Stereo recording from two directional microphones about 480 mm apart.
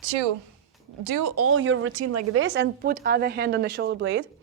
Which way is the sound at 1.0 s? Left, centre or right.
Right.